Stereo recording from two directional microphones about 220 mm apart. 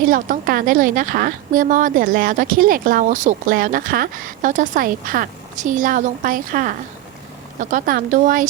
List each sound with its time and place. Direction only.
0.1 s a woman's voice: 40° right (ahead or behind)